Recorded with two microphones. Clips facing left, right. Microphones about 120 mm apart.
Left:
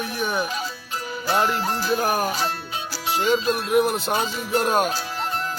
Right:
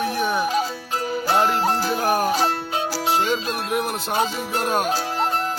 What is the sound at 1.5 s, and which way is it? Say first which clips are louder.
Music: right 4 dB; 75° right (ahead or behind).